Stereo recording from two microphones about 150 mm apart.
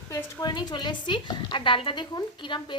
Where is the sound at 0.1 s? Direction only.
20° left (ahead or behind).